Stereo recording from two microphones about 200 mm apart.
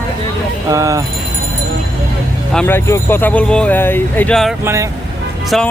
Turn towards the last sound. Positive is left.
turn(degrees=0)  # may be behind; listen again after turning